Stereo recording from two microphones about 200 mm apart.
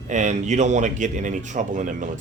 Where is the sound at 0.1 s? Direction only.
35° right (ahead or behind).